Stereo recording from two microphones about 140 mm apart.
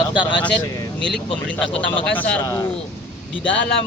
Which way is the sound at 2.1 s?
10° left (ahead or behind).